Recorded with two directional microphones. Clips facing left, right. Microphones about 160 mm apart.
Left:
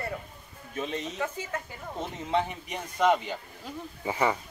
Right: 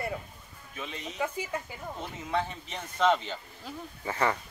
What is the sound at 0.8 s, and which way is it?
Speech, 40° left (ahead or behind).